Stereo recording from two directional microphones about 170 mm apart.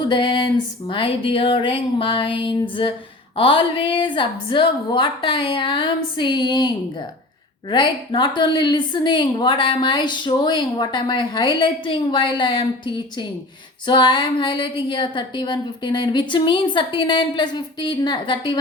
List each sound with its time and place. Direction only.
0.1 s a woman's voice: 25° left (ahead or behind)
7.7 s a woman's voice: 25° left (ahead or behind)